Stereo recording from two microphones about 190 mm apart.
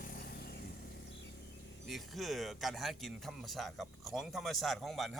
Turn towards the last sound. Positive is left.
turn(degrees=0)  # may be behind; listen again after turning